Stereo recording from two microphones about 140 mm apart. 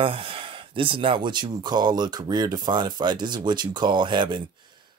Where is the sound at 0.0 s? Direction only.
40° right (ahead or behind).